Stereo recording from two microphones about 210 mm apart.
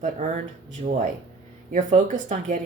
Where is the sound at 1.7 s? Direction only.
35° right (ahead or behind).